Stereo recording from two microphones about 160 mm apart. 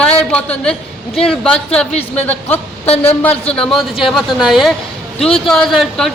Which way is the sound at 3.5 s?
5° left (ahead or behind).